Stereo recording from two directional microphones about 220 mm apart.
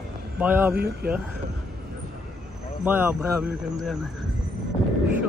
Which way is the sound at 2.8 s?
10° right (ahead or behind).